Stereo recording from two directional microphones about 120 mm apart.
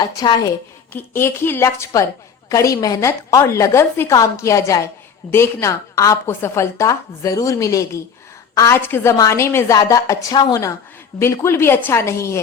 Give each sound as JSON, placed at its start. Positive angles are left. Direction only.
{"t": 0.0, "sound": "a woman's voice", "side_deg": 35}
{"t": 0.9, "sound": "a woman's voice", "side_deg": 20}
{"t": 10.3, "sound": "a woman's voice", "side_deg": 40}
{"t": 11.2, "sound": "a woman's voice", "side_deg": 20}